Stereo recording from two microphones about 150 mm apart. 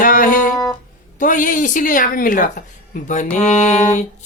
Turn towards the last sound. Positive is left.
turn(degrees=50)  # may be behind; listen again after turning